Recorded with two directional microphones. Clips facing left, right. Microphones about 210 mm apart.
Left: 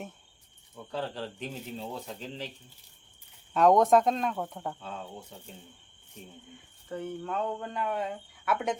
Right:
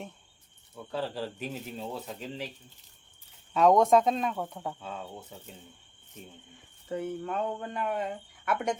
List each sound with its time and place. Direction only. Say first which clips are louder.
0.9 s speech: right 1 dB; 5° right (ahead or behind)
3.5 s speech: even; centre (ahead or behind)
6.9 s speech: right 2 dB; 5° right (ahead or behind)